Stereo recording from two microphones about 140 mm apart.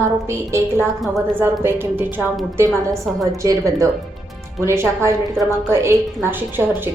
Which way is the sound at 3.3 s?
25° right (ahead or behind).